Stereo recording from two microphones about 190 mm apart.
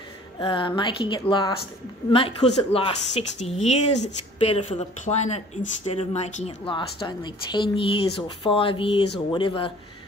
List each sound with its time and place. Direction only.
0.4 s speech: 25° left (ahead or behind)